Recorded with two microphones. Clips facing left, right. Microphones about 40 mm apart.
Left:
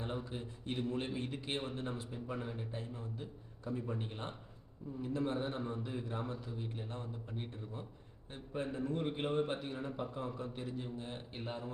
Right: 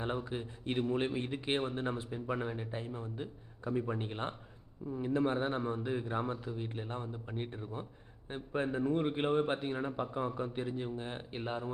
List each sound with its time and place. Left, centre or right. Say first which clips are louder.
0.3 s a man's voice: right 4 dB; right